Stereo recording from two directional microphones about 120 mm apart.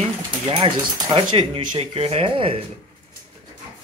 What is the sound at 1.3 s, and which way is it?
Speech, 55° right (ahead or behind).